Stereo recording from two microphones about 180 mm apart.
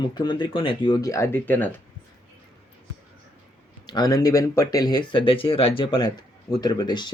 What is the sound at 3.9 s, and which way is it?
Speech, 20° left (ahead or behind).